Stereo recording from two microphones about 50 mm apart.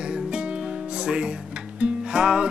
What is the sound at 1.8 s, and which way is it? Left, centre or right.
Music, centre.